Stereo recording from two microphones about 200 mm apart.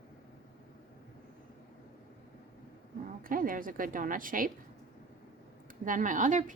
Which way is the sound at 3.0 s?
45° right (ahead or behind).